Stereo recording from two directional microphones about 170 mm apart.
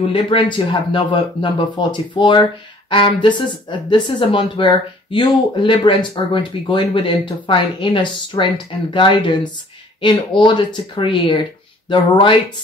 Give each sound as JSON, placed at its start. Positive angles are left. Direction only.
{"t": 0.0, "sound": "speech", "side_deg": 30}